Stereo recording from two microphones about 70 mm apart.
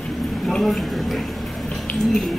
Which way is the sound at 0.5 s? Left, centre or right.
Centre.